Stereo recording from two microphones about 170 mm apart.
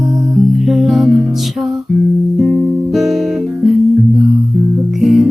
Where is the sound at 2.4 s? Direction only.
Centre (ahead or behind).